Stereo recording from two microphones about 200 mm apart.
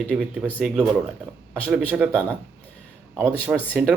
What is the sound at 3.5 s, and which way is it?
Speech, 5° left (ahead or behind).